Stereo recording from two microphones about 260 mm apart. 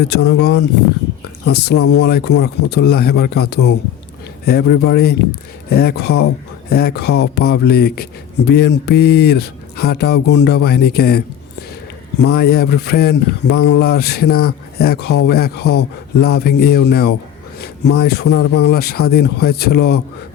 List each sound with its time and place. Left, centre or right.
0.0 s speech: left
12.2 s speech: left